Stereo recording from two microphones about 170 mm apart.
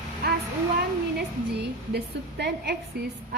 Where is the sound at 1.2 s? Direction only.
75° right (ahead or behind).